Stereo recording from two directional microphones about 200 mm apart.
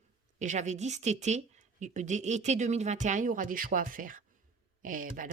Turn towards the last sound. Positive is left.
turn(degrees=-45)  # may be behind; listen again after turning